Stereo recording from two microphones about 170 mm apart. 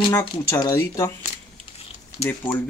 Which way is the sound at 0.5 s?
20° left (ahead or behind).